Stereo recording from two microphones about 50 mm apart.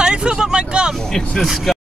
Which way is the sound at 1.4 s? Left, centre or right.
Centre.